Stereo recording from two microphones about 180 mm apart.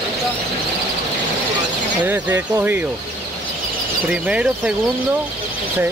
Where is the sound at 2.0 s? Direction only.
10° right (ahead or behind).